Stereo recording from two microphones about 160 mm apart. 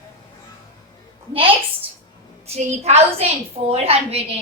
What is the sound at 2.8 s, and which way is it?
A woman's voice, 40° right (ahead or behind).